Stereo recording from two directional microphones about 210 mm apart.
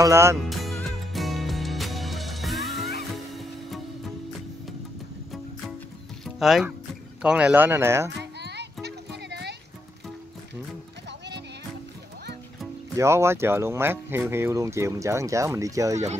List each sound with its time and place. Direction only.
0.0 s speech: 15° right (ahead or behind)
0.5 s music: centre (ahead or behind)
6.2 s music: centre (ahead or behind)
7.2 s speech: 5° right (ahead or behind)
8.2 s music: 55° right (ahead or behind)
11.1 s music: 55° right (ahead or behind)
12.9 s speech: 15° right (ahead or behind)